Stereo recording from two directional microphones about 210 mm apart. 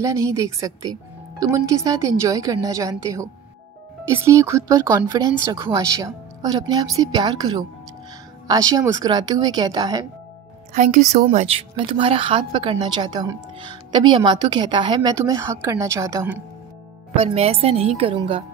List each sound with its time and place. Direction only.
0.0 s speech: 15° right (ahead or behind)
10.7 s speech: 40° right (ahead or behind); by 16.4 s 15° right (ahead or behind)
17.1 s speech: 25° right (ahead or behind)